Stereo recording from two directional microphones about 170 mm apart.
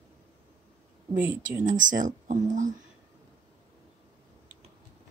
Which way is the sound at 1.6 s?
50° right (ahead or behind).